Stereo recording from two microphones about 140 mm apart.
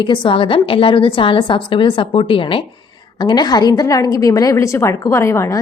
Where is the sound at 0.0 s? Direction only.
35° left (ahead or behind).